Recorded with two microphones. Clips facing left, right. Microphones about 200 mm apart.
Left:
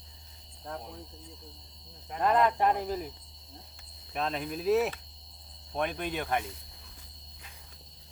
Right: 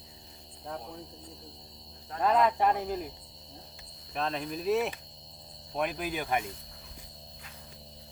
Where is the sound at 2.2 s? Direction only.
Centre (ahead or behind).